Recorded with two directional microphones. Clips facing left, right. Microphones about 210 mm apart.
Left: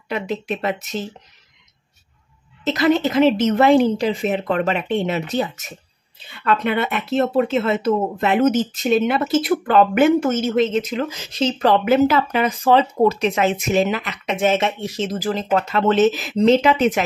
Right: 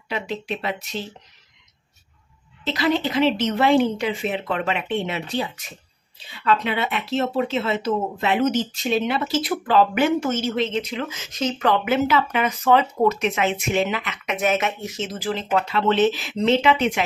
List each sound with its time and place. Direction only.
0.1 s speech: 50° left (ahead or behind)
2.6 s speech: 45° left (ahead or behind)